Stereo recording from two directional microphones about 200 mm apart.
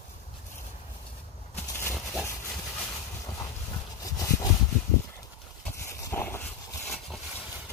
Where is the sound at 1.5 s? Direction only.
5° left (ahead or behind).